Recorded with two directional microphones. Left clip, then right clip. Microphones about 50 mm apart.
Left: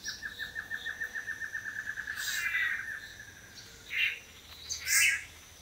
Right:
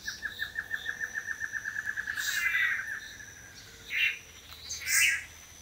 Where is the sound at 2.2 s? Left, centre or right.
Centre.